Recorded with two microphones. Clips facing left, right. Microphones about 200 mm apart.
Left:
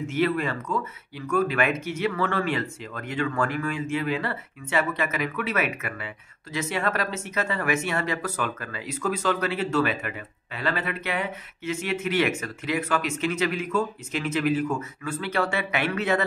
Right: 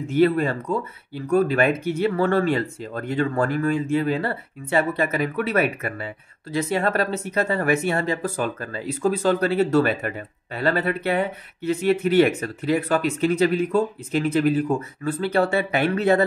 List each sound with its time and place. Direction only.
0.0 s speech: 35° right (ahead or behind)